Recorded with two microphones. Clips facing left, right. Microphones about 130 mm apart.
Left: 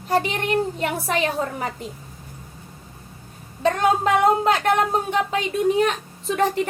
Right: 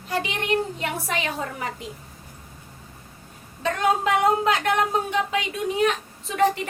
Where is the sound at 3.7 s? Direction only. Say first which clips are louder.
Left 1 dB; 40° left (ahead or behind).